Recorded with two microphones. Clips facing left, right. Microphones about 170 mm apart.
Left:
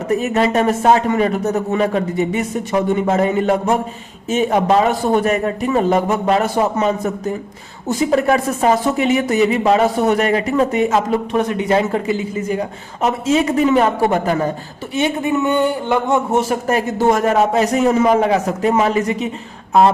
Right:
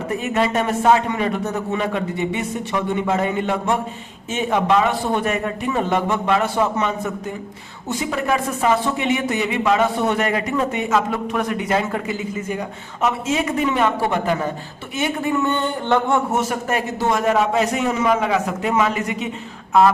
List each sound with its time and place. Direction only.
0.2 s speech: 35° left (ahead or behind)
14.9 s speech: 20° left (ahead or behind)
16.3 s speech: 30° left (ahead or behind)